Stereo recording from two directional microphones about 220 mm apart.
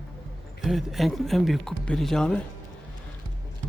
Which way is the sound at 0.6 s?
Centre (ahead or behind).